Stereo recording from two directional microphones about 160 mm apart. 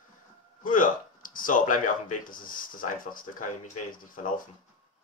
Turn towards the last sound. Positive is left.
turn(degrees=55)  # may be behind; listen again after turning